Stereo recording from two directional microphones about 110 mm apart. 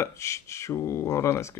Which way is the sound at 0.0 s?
25° left (ahead or behind).